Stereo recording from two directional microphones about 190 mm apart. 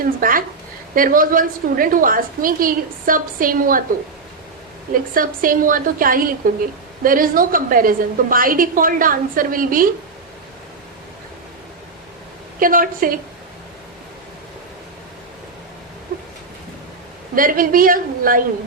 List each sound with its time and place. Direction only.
0.0 s a woman's voice: 45° right (ahead or behind)
5.1 s a woman's voice: 45° right (ahead or behind)
12.5 s a woman's voice: 45° right (ahead or behind)
17.3 s a woman's voice: 45° right (ahead or behind)